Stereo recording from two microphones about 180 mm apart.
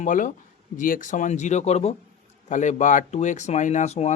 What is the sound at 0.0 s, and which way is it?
Speech, 45° left (ahead or behind).